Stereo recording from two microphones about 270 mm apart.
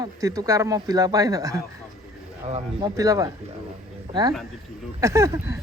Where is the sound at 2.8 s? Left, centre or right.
Centre.